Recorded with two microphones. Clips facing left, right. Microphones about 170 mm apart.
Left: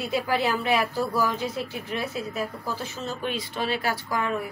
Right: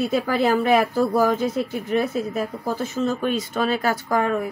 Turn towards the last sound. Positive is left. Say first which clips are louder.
# right 6 dB
turn(degrees=-45)  # may be behind; listen again after turning